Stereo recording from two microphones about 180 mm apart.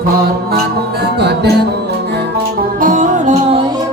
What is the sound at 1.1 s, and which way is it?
Music, 65° right (ahead or behind).